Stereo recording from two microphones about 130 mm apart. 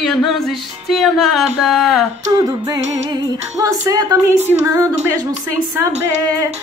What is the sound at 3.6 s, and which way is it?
Speech, 25° right (ahead or behind).